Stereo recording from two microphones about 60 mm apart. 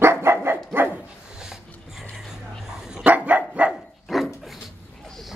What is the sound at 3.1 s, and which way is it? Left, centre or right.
Dog, right.